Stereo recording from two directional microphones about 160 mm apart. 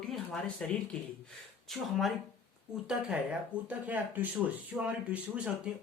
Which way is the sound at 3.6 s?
10° right (ahead or behind).